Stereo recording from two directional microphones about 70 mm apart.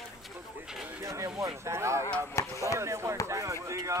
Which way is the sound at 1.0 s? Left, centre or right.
Right.